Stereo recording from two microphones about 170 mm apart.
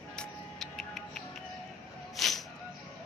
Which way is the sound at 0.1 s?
5° left (ahead or behind).